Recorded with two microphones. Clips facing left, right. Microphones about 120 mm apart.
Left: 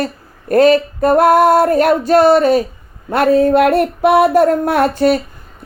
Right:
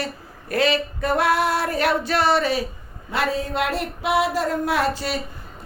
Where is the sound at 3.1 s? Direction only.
55° left (ahead or behind).